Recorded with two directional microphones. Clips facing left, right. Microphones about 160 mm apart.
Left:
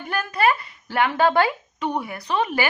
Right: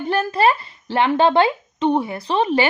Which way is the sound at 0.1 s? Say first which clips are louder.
Right 4 dB; 30° right (ahead or behind).